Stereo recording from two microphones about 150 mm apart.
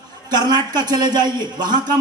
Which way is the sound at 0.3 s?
30° right (ahead or behind).